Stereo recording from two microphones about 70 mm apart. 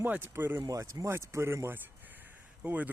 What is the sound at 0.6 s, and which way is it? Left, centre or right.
Speech, right.